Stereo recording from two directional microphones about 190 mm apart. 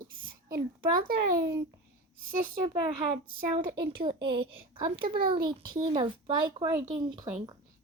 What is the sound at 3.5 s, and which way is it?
A child's voice, 25° right (ahead or behind).